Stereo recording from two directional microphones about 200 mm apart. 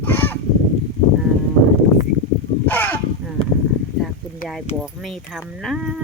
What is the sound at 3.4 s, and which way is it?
Clip-clop, 25° left (ahead or behind).